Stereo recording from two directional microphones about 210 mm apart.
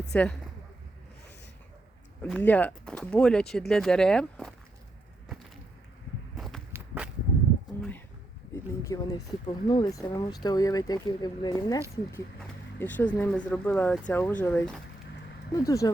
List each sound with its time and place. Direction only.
0.1 s speech: 5° left (ahead or behind)
2.2 s speech: 5° left (ahead or behind)
6.3 s a sound: centre (ahead or behind)
6.7 s walk: 5° right (ahead or behind)
7.8 s pigeon: 5° left (ahead or behind)
8.8 s speech: 15° left (ahead or behind)
12.8 s speech: 10° left (ahead or behind)